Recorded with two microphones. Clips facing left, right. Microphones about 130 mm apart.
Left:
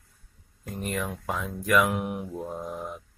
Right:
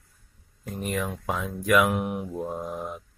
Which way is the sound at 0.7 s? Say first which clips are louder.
Right 2 dB; centre (ahead or behind).